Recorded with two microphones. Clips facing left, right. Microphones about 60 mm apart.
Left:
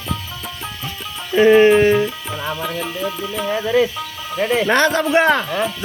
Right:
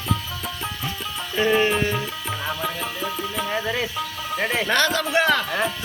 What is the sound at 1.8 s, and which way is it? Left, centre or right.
Music, left.